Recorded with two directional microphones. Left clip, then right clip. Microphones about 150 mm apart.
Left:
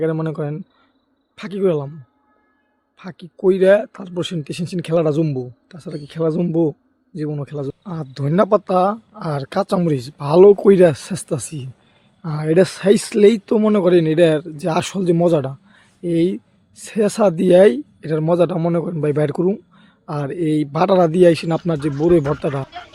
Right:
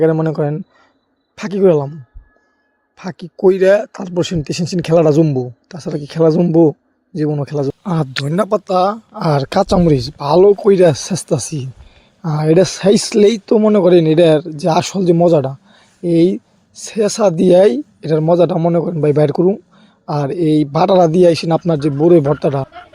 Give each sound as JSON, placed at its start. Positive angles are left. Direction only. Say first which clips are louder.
{"t": 0.0, "sound": "speech", "louder": "right 7 dB", "side_deg": -35}
{"t": 3.0, "sound": "speech", "louder": "right 6 dB", "side_deg": -40}
{"t": 7.9, "sound": "speech", "louder": "right 12 dB", "side_deg": -75}
{"t": 8.5, "sound": "speech", "louder": "right 2 dB", "side_deg": -55}
{"t": 9.7, "sound": "speech", "louder": "right 6 dB", "side_deg": -35}